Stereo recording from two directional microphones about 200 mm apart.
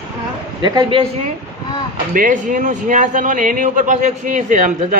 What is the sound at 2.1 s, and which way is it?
A man's voice, 40° right (ahead or behind).